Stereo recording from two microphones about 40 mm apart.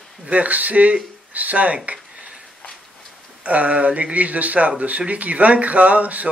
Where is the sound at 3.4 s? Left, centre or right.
Right.